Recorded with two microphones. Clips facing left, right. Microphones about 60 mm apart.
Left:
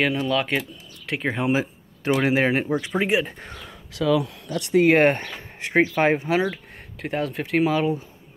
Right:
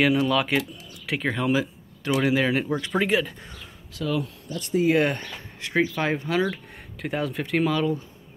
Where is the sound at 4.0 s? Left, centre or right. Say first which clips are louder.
Left 6 dB; left.